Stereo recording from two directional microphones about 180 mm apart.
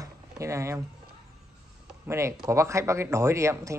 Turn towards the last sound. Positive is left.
turn(degrees=-15)  # may be behind; listen again after turning